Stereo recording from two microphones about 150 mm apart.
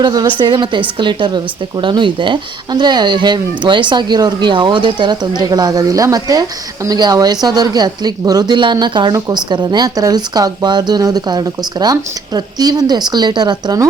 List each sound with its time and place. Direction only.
0.0 s speech: 30° right (ahead or behind)